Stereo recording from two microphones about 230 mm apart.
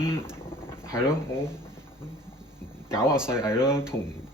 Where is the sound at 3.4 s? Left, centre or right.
Centre.